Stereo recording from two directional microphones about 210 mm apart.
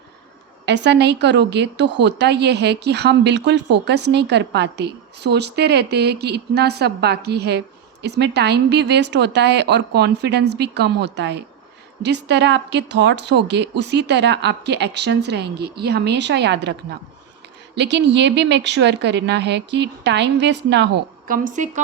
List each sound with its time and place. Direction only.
0.6 s speech: 55° right (ahead or behind)
21.2 s a woman's voice: 40° right (ahead or behind)